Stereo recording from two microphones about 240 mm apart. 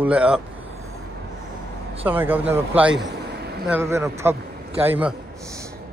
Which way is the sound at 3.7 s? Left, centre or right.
Centre.